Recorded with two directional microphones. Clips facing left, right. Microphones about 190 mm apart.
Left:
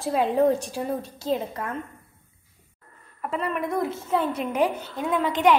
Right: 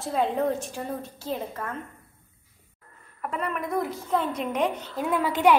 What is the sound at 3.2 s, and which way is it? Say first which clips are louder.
A woman's voice: left 3 dB; centre (ahead or behind).